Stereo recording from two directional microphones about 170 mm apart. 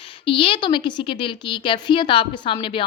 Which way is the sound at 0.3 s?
30° left (ahead or behind).